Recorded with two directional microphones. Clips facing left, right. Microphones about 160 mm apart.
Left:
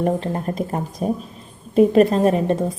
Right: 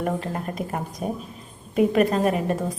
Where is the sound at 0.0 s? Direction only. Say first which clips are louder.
Left 5 dB; 30° left (ahead or behind).